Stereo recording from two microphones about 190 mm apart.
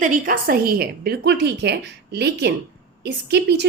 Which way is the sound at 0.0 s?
45° right (ahead or behind).